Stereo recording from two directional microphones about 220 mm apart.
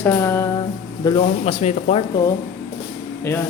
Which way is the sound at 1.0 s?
25° left (ahead or behind).